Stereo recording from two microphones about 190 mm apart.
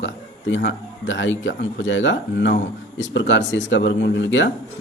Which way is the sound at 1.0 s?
80° left.